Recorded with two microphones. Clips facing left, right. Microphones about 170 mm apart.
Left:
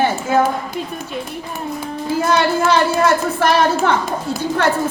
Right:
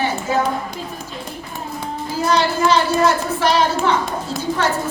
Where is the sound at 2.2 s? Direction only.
55° left (ahead or behind).